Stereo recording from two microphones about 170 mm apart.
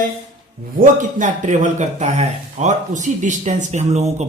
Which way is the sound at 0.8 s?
50° right (ahead or behind).